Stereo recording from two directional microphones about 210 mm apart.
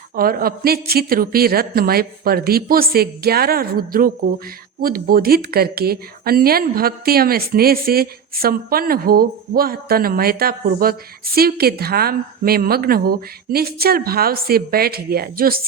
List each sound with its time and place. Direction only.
0.2 s speech: 45° right (ahead or behind)